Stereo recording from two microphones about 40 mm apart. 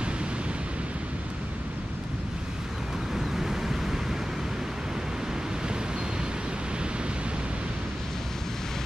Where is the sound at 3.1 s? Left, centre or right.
Centre.